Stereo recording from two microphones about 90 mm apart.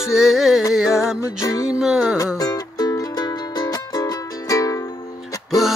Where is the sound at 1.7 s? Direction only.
5° right (ahead or behind).